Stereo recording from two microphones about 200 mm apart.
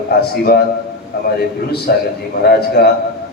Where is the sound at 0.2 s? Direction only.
50° left (ahead or behind).